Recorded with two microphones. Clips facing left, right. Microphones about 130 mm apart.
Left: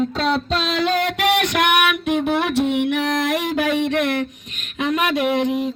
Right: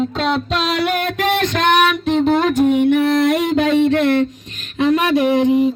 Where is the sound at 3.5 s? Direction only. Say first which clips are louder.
Right 5 dB; 10° left (ahead or behind).